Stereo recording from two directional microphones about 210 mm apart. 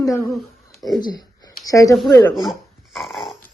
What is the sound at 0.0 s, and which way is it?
Speech, 15° left (ahead or behind).